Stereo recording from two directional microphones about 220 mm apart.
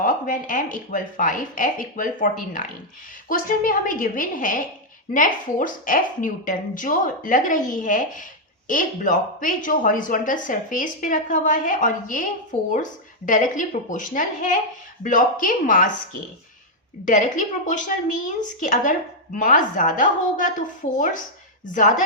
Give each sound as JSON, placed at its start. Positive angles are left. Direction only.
{"t": 0.0, "sound": "speech", "side_deg": 40}
{"t": 17.1, "sound": "speech", "side_deg": 35}